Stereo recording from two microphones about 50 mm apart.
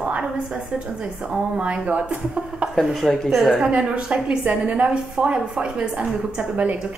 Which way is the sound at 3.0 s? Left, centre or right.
Centre.